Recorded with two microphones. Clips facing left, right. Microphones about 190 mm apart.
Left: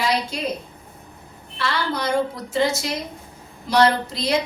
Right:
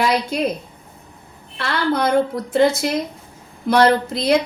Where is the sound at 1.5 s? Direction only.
55° right (ahead or behind).